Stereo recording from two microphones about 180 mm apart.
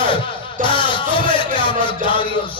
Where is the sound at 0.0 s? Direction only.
25° left (ahead or behind).